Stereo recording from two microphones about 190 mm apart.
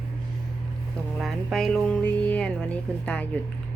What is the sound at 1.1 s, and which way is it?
Speech, centre (ahead or behind).